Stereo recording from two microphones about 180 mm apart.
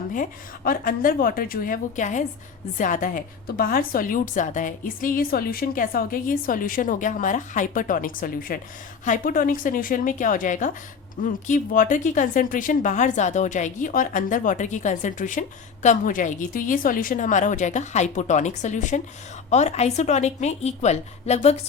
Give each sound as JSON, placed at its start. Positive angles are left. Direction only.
{"t": 0.1, "sound": "a woman's voice", "side_deg": 50}